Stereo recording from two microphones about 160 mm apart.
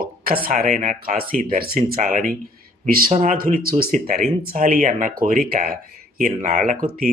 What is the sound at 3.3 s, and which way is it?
Speech, 65° right (ahead or behind).